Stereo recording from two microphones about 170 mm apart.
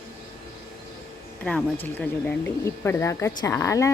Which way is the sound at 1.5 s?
5° left (ahead or behind).